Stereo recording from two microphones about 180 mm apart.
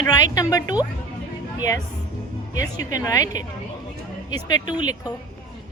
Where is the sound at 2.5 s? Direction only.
20° left (ahead or behind).